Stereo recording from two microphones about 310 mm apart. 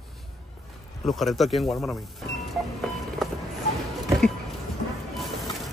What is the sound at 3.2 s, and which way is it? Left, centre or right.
Vehicle, centre.